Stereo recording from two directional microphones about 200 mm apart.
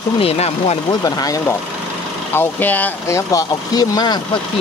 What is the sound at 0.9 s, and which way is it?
Speech, 20° left (ahead or behind).